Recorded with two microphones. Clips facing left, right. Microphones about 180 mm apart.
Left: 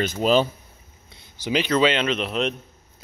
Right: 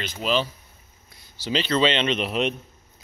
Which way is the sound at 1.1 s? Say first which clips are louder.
Left 2 dB; 25° left (ahead or behind).